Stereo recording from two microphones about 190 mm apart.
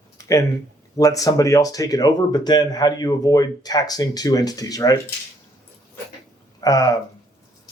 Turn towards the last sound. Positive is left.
turn(degrees=20)  # may be behind; listen again after turning